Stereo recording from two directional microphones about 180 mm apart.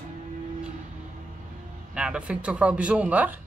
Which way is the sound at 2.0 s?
5° right (ahead or behind).